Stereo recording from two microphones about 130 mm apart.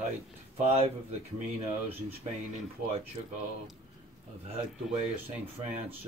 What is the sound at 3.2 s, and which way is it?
Speech, 35° right (ahead or behind).